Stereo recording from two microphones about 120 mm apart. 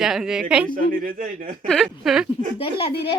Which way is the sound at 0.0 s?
5° right (ahead or behind).